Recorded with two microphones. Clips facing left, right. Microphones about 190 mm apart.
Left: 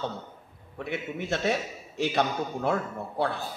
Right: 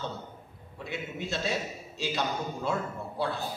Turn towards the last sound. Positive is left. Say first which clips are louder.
# left 3 dB
turn(degrees=60)  # may be behind; listen again after turning